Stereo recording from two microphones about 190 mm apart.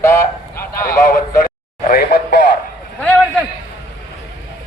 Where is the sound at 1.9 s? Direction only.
55° left (ahead or behind).